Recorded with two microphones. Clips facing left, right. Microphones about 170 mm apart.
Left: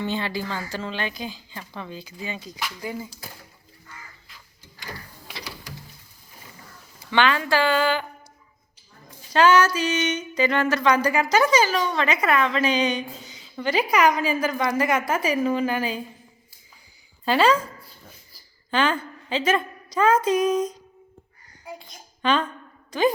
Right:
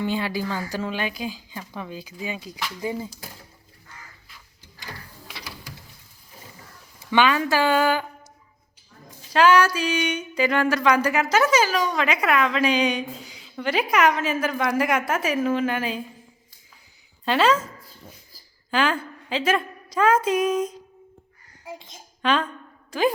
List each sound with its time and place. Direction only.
0.0 s a woman's voice: 10° right (ahead or behind)
2.8 s a child's voice: 25° right (ahead or behind)
7.1 s a woman's voice: 15° right (ahead or behind)
9.3 s speech: 5° right (ahead or behind)
17.2 s speech: centre (ahead or behind)
18.7 s speech: 5° right (ahead or behind)
21.7 s a child's voice: 20° right (ahead or behind)
22.2 s a woman's voice: centre (ahead or behind)